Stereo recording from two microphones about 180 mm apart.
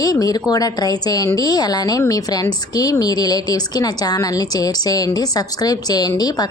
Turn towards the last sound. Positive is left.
turn(degrees=20)  # may be behind; listen again after turning